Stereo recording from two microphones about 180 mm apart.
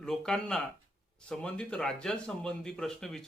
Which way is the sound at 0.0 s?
5° left (ahead or behind).